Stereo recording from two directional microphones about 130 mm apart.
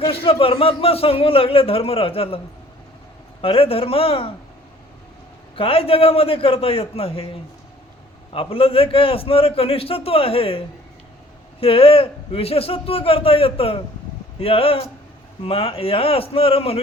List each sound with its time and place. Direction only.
0.1 s a man's voice: 45° left (ahead or behind)
3.4 s a man's voice: 45° left (ahead or behind)
5.5 s a man's voice: 45° left (ahead or behind)
8.3 s a man's voice: 45° left (ahead or behind)
11.6 s a man's voice: 45° left (ahead or behind)